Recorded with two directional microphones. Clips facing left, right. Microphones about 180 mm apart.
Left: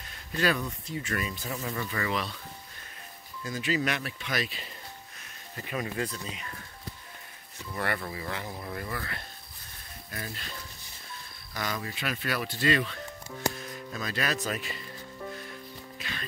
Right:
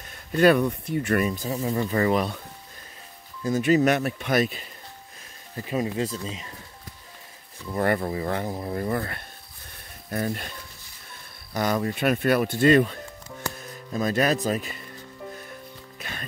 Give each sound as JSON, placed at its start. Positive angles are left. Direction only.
{"t": 0.4, "sound": "speech", "side_deg": -60}
{"t": 1.4, "sound": "speech", "side_deg": -35}
{"t": 3.4, "sound": "speech", "side_deg": -45}
{"t": 5.7, "sound": "speech", "side_deg": -25}
{"t": 7.7, "sound": "speech", "side_deg": -40}
{"t": 10.1, "sound": "speech", "side_deg": -50}
{"t": 11.5, "sound": "speech", "side_deg": -45}
{"t": 16.0, "sound": "music", "side_deg": -50}